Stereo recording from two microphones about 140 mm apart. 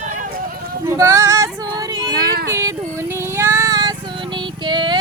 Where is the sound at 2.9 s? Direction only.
20° right (ahead or behind).